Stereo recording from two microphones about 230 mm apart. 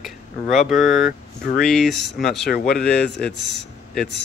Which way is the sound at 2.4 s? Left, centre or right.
Left.